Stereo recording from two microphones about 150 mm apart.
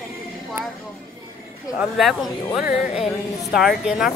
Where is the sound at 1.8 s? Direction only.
Centre (ahead or behind).